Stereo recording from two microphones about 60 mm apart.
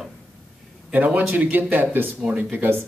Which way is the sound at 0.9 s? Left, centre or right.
Right.